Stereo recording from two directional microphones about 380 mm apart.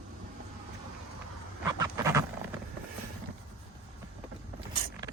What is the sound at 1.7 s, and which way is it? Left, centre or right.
Duck, centre.